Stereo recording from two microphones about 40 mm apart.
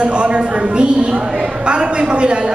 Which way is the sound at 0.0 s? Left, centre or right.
Right.